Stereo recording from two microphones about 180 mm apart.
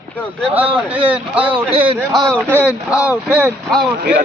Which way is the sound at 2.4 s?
10° right (ahead or behind).